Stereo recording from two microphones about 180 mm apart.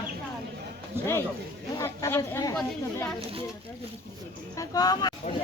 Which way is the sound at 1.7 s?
15° left (ahead or behind).